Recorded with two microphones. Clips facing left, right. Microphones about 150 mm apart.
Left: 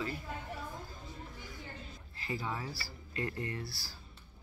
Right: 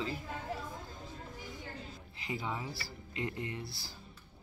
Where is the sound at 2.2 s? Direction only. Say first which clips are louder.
Even; 15° right (ahead or behind).